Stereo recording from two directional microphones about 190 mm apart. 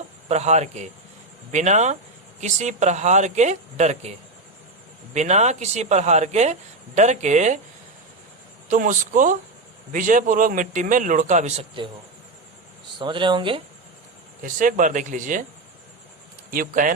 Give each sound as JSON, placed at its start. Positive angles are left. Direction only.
{"t": 0.3, "sound": "speech", "side_deg": -35}
{"t": 5.1, "sound": "speech", "side_deg": -35}
{"t": 8.7, "sound": "a man's voice", "side_deg": -45}
{"t": 13.0, "sound": "speech", "side_deg": -25}
{"t": 14.4, "sound": "a man's voice", "side_deg": -45}
{"t": 16.5, "sound": "a man's voice", "side_deg": -45}